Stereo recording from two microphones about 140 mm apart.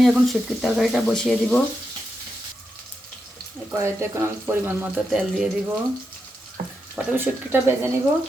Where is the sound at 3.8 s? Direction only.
20° right (ahead or behind).